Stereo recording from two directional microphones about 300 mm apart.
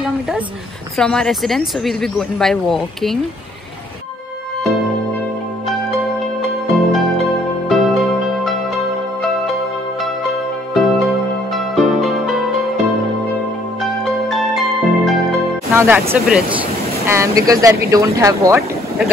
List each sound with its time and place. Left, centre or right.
0.9 s speech: centre
6.4 s music: centre
10.7 s music: centre
13.8 s music: centre
15.7 s speech: centre